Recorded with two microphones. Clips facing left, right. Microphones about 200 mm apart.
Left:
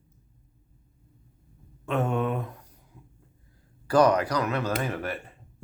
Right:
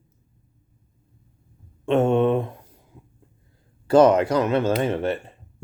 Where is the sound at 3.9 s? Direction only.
25° right (ahead or behind).